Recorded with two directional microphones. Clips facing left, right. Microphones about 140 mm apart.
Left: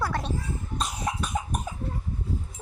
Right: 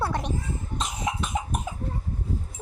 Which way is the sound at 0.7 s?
20° right (ahead or behind).